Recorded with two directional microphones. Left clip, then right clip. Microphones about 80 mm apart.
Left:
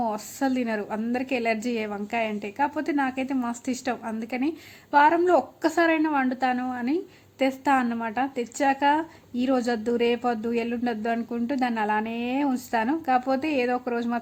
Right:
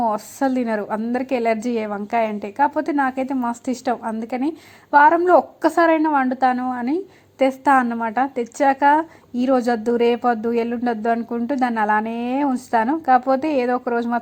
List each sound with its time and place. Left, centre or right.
0.0 s a woman's voice: right
7.9 s a woman's voice: right